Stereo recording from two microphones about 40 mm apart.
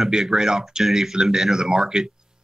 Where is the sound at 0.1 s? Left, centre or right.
Centre.